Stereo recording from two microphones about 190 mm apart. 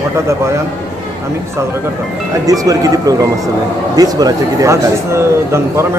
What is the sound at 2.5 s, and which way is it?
Speech, 20° right (ahead or behind).